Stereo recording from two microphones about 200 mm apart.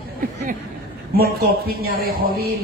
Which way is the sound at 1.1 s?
50° right (ahead or behind).